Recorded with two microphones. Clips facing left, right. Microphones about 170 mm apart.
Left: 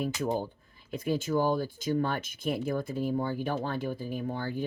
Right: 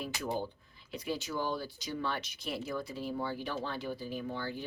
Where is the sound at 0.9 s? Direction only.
50° left (ahead or behind).